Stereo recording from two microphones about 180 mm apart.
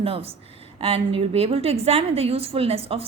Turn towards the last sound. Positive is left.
turn(degrees=-35)  # may be behind; listen again after turning